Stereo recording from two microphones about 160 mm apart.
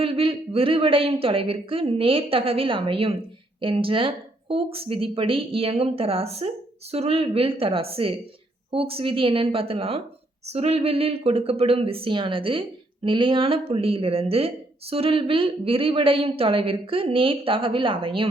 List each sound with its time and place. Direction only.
0.0 s speech: 35° right (ahead or behind)